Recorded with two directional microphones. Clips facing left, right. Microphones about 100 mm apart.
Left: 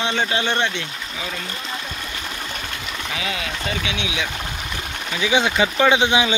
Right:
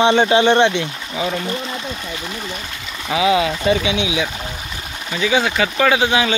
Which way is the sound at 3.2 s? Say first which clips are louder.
Right 14 dB; 15° right (ahead or behind).